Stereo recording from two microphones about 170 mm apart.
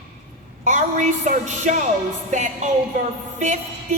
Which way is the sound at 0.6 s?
50° right (ahead or behind).